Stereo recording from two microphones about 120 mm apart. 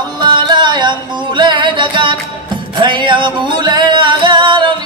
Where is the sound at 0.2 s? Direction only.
40° right (ahead or behind).